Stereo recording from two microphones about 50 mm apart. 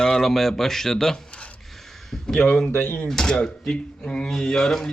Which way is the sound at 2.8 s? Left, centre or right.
Left.